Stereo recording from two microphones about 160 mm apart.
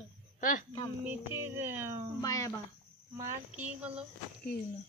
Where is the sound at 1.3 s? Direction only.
15° right (ahead or behind).